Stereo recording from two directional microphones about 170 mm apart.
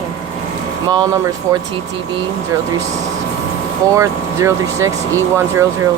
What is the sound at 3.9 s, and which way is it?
Speech, 15° right (ahead or behind).